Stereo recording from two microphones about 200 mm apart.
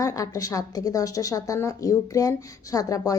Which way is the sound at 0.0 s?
15° left (ahead or behind).